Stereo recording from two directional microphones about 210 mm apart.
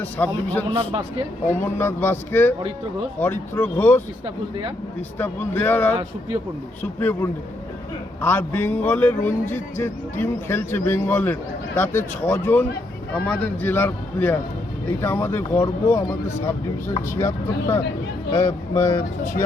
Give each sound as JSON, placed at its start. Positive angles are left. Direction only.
{"t": 0.0, "sound": "a man's voice", "side_deg": 10}
{"t": 0.7, "sound": "a man's voice", "side_deg": -25}
{"t": 1.5, "sound": "a man's voice", "side_deg": 10}
{"t": 5.1, "sound": "a man's voice", "side_deg": 10}